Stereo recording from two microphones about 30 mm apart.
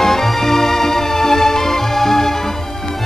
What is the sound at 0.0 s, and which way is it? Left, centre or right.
Music, centre.